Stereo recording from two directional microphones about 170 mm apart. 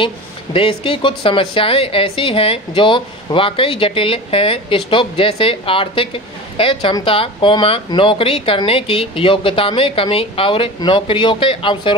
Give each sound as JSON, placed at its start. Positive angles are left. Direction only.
{"t": 0.0, "sound": "speech", "side_deg": 30}